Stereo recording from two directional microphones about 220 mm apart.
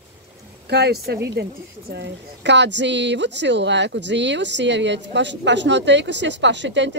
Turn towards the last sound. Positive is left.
turn(degrees=-55)  # may be behind; listen again after turning